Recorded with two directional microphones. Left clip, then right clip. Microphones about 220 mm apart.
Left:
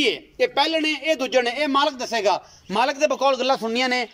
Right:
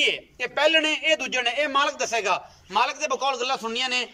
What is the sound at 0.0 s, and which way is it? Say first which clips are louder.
A man's voice: left 3 dB; 25° left (ahead or behind).